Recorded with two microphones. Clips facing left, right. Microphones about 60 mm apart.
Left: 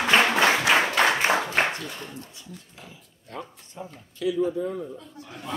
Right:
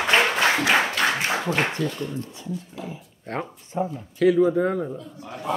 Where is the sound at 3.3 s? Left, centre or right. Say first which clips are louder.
Right 8 dB; right.